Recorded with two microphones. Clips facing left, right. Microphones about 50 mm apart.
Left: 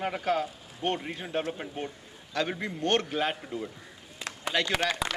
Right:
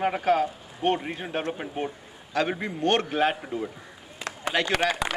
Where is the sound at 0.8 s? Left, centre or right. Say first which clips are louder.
Right 5 dB; centre.